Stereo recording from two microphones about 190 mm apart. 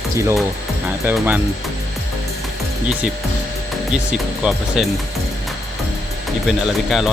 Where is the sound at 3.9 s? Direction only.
5° right (ahead or behind).